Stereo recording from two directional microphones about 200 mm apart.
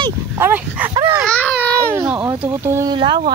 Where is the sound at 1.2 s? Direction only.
5° left (ahead or behind).